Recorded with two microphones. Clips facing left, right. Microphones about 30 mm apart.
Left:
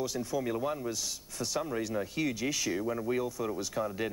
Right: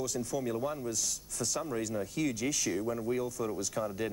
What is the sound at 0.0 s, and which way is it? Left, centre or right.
Speech, left.